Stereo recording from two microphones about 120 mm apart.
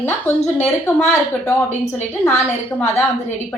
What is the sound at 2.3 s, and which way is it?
A woman's voice, 15° left (ahead or behind).